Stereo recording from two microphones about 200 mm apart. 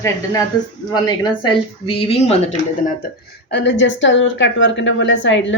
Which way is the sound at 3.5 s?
60° left (ahead or behind).